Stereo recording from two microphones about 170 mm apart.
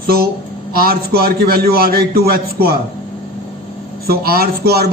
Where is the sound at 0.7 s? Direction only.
60° right (ahead or behind).